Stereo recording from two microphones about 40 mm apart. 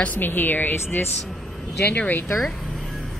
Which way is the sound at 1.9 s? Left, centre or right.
Left.